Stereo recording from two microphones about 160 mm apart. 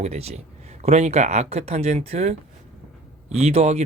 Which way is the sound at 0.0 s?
40° right (ahead or behind).